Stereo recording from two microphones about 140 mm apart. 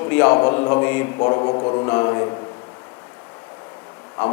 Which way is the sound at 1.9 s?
20° left (ahead or behind).